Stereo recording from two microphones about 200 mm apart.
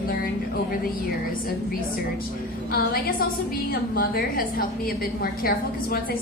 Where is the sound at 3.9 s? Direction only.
45° left (ahead or behind).